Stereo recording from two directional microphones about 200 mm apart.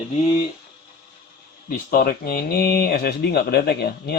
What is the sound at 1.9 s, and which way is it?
Speech, 45° left (ahead or behind).